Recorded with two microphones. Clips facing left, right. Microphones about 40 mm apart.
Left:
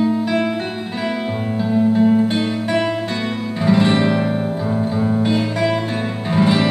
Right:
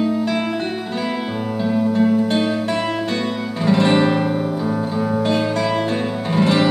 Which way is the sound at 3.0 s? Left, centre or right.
Centre.